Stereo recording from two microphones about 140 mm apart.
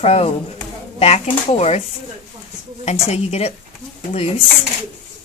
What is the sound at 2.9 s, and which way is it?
Speech, 50° left (ahead or behind).